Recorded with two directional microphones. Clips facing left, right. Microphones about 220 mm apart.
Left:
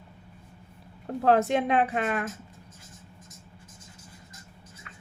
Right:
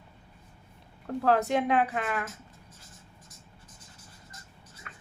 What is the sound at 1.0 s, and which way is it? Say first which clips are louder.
Speech: left 3 dB; 25° left (ahead or behind).